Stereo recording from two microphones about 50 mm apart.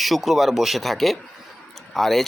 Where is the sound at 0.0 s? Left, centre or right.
Centre.